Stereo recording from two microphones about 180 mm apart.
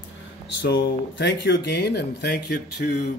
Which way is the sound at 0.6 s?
70° left (ahead or behind).